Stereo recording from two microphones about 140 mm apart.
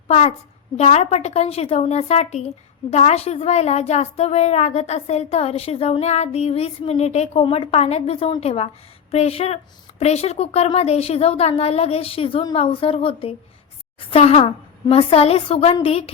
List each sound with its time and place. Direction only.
0.1 s a woman's voice: 55° left (ahead or behind)